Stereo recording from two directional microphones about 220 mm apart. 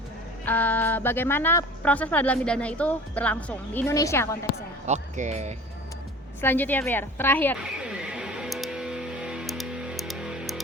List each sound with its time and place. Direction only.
0.4 s speech: 5° left (ahead or behind)
4.9 s speech: 30° right (ahead or behind)
6.4 s speech: 10° left (ahead or behind)
7.8 s music: 5° right (ahead or behind)